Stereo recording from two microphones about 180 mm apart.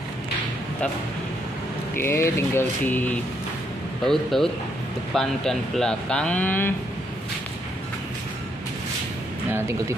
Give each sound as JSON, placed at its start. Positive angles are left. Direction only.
{"t": 2.0, "sound": "a sound", "side_deg": 15}
{"t": 4.0, "sound": "speech", "side_deg": 0}
{"t": 9.5, "sound": "speech", "side_deg": -15}